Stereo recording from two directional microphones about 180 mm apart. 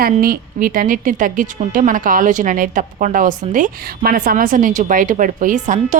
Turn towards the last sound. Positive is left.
turn(degrees=-40)  # may be behind; listen again after turning